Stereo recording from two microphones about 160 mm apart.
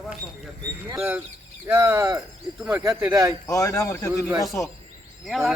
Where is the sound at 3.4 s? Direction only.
20° left (ahead or behind).